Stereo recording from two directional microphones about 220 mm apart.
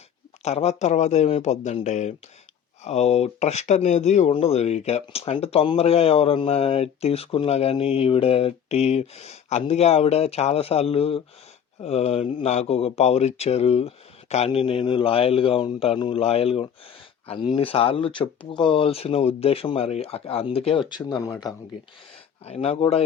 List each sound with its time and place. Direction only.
0.4 s speech: 30° left (ahead or behind)
22.4 s speech: 25° left (ahead or behind)